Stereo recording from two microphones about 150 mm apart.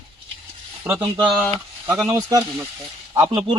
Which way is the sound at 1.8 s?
15° right (ahead or behind).